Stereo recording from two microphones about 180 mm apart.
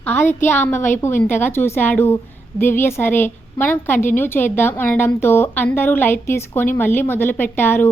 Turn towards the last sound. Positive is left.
turn(degrees=10)  # may be behind; listen again after turning